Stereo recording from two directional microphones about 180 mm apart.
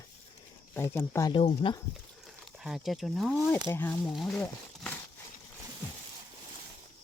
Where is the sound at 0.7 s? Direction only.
15° left (ahead or behind).